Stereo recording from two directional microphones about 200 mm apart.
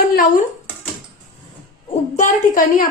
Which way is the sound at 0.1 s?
45° left (ahead or behind).